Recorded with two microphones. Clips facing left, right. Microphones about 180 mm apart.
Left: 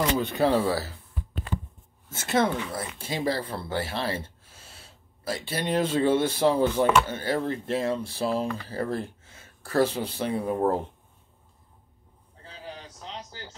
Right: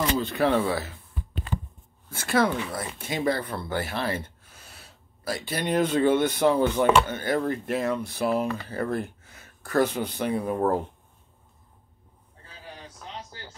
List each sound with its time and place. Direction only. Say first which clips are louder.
0.5 s speech: even; 35° left (ahead or behind)
2.0 s speech: right 1 dB; 25° left (ahead or behind)